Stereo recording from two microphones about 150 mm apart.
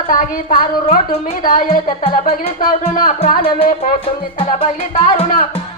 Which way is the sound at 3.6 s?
60° left (ahead or behind).